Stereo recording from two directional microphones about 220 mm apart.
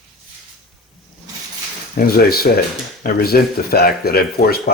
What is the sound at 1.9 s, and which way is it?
Speech, 45° left (ahead or behind).